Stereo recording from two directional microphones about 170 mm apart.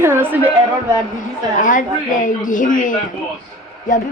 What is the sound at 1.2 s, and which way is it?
A woman's voice, 50° left (ahead or behind).